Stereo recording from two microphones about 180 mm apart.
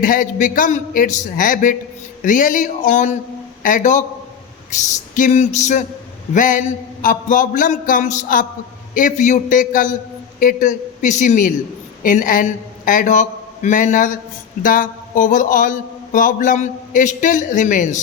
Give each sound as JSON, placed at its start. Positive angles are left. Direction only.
{"t": 0.0, "sound": "speech", "side_deg": 50}
{"t": 5.1, "sound": "a sound", "side_deg": 40}
{"t": 6.3, "sound": "a man's voice", "side_deg": 45}